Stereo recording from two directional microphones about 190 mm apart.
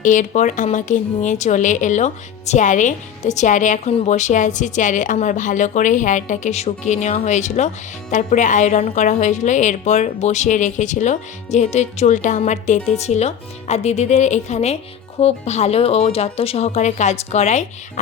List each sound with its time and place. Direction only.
0.0 s speech: 40° left (ahead or behind)